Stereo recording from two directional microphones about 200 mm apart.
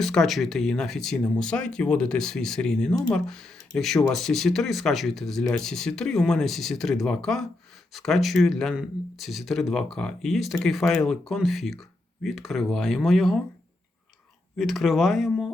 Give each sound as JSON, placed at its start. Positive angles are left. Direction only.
{"t": 0.0, "sound": "speech", "side_deg": 0}
{"t": 2.9, "sound": "speech", "side_deg": 15}
{"t": 3.2, "sound": "speech", "side_deg": 5}
{"t": 14.6, "sound": "speech", "side_deg": 0}